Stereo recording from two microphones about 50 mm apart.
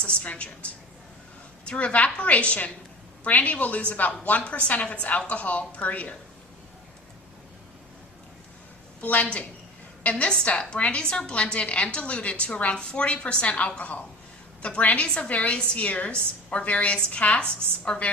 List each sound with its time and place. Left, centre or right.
0.0 s a woman's voice: left
9.0 s a woman's voice: left